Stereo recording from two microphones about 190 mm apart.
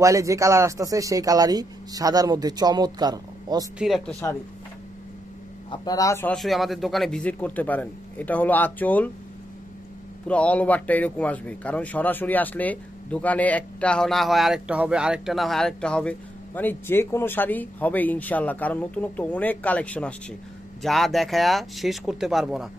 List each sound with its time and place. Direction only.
0.0 s speech: 15° right (ahead or behind)
3.7 s speech: centre (ahead or behind)
5.7 s speech: 20° left (ahead or behind)
6.3 s speech: centre (ahead or behind)
10.2 s speech: 5° left (ahead or behind)